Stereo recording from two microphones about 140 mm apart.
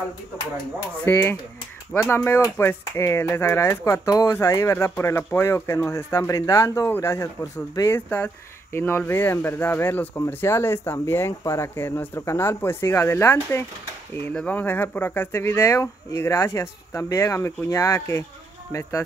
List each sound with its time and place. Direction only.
1.0 s speech: 15° left (ahead or behind)